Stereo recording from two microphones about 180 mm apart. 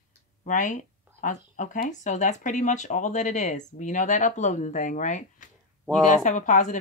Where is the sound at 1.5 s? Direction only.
45° left (ahead or behind).